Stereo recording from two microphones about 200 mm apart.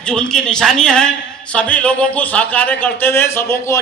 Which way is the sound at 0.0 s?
5° left (ahead or behind).